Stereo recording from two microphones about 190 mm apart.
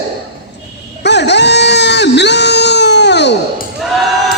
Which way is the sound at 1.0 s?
65° left (ahead or behind).